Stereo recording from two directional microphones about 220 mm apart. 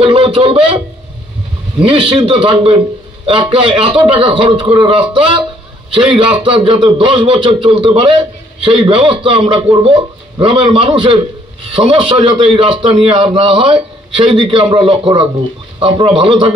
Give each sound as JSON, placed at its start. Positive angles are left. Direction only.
{"t": 0.0, "sound": "a man's voice", "side_deg": -25}